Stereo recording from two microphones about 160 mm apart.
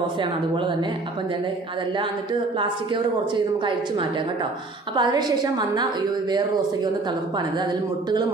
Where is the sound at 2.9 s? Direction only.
30° right (ahead or behind).